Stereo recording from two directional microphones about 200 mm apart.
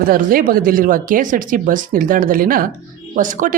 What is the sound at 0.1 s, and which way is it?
Speech, 45° right (ahead or behind).